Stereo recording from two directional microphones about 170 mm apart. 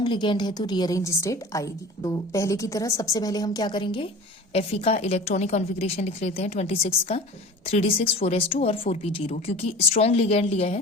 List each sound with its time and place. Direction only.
0.0 s a woman's voice: 30° left (ahead or behind)